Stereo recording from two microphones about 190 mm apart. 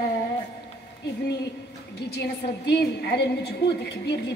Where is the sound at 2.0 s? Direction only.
60° left (ahead or behind).